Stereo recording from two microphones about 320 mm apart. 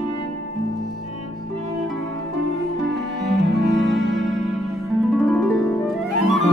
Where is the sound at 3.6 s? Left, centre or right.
Right.